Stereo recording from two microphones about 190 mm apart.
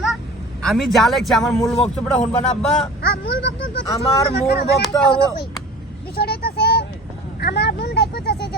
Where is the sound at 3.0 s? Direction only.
65° left (ahead or behind).